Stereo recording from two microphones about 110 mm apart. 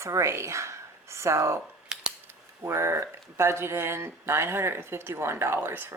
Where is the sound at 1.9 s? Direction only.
5° right (ahead or behind).